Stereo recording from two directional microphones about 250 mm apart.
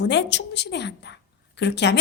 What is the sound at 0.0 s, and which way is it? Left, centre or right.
A woman's voice, left.